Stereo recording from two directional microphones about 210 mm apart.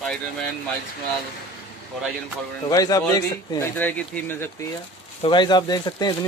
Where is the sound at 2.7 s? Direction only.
15° left (ahead or behind).